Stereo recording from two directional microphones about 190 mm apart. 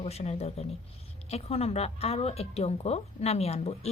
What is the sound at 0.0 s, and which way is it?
A woman's voice, 35° left (ahead or behind).